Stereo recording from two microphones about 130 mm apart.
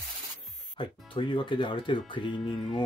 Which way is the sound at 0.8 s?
40° left (ahead or behind).